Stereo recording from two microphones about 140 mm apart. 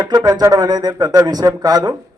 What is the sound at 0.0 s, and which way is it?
A man's voice, 30° right (ahead or behind).